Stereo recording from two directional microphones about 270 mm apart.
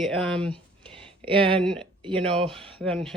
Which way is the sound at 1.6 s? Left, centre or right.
Centre.